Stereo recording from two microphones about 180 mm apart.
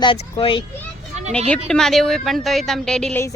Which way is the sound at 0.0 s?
30° left (ahead or behind).